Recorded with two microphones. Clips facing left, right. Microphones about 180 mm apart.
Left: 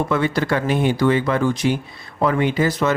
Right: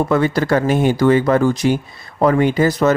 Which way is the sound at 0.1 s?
40° right (ahead or behind).